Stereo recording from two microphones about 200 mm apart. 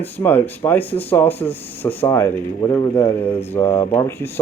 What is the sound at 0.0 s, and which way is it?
Speech, 10° left (ahead or behind).